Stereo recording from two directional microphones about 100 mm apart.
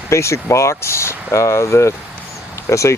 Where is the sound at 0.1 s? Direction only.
30° left (ahead or behind).